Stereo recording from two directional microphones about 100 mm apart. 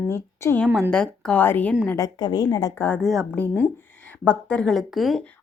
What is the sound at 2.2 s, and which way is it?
Speech, 40° left (ahead or behind).